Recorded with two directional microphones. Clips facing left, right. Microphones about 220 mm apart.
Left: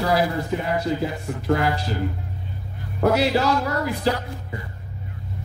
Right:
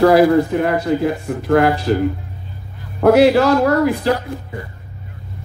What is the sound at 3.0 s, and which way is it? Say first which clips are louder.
Speech: right 9 dB; 55° right (ahead or behind).